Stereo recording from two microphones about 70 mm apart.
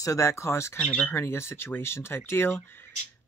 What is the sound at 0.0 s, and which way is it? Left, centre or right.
Speech, left.